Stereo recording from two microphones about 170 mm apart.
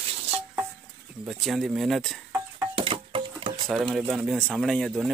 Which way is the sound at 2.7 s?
30° right (ahead or behind).